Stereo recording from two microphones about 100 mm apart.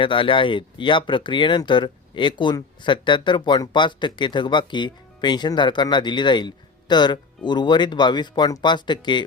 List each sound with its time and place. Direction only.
0.0 s speech: 55° left (ahead or behind)